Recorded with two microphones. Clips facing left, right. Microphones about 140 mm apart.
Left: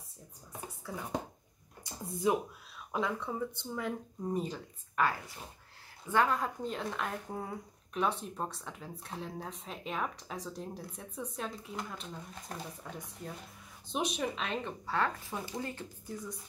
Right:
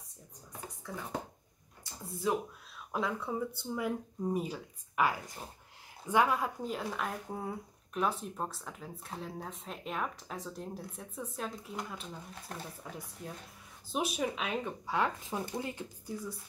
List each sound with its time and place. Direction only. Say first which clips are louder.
0.8 s speech: left 2 dB; 10° left (ahead or behind)
2.9 s speech: even; centre (ahead or behind)